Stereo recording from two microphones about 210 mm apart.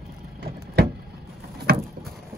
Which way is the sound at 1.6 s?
50° right (ahead or behind).